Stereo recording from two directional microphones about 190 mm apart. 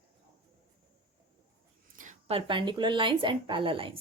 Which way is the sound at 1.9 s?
40° right (ahead or behind).